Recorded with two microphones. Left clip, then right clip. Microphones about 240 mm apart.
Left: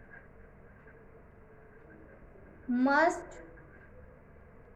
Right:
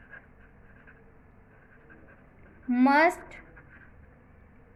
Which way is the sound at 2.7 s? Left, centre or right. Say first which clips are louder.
Right 5 dB; right.